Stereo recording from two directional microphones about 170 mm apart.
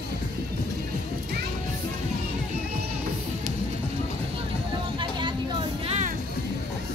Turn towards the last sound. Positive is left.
turn(degrees=-45)  # may be behind; listen again after turning